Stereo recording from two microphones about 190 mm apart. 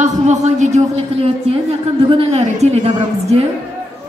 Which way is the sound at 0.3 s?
40° right (ahead or behind).